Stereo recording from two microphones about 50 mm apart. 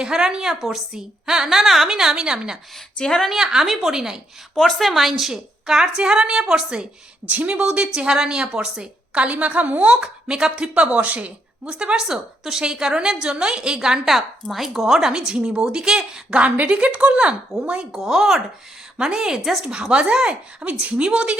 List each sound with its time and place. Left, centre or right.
0.0 s a woman's voice: centre
3.0 s a woman's voice: centre
3.2 s a woman's voice: centre
4.5 s a woman's voice: centre
9.1 s speech: right
9.9 s a woman's voice: centre
10.8 s speech: right
11.6 s a woman's voice: centre
16.4 s speech: right
17.9 s a woman's voice: centre